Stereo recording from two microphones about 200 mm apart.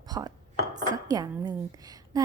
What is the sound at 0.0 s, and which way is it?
Dishes, 20° right (ahead or behind).